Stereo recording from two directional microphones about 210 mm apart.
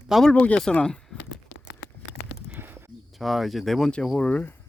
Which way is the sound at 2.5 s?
10° right (ahead or behind).